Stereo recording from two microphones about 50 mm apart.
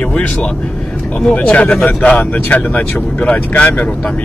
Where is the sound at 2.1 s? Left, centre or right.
Left.